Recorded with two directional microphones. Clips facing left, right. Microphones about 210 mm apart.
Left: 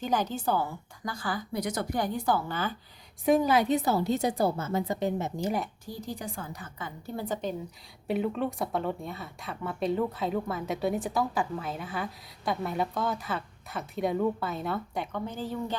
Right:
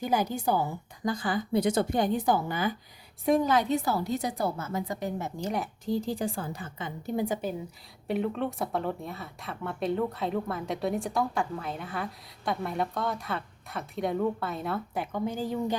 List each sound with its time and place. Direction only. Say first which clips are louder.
0.0 s a woman's voice: right 1 dB; 10° right (ahead or behind)
3.2 s a woman's voice: left 1 dB; 5° left (ahead or behind)
3.8 s a woman's voice: left 2 dB; 25° left (ahead or behind)
5.4 s speech: even; centre (ahead or behind)
5.8 s a woman's voice: right 8 dB; 25° right (ahead or behind)
8.0 s speech: even; centre (ahead or behind)